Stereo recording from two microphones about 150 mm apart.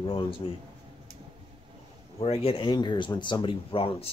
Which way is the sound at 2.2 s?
40° left (ahead or behind).